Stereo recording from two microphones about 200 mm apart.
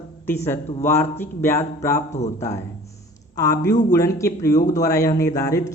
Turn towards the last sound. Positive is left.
turn(degrees=15)  # may be behind; listen again after turning